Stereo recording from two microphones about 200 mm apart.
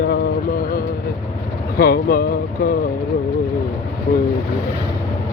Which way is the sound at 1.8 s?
45° left (ahead or behind).